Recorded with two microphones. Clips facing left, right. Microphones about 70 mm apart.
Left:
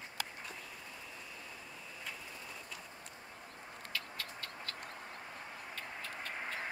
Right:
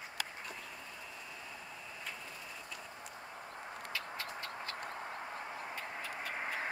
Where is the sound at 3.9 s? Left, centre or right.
Right.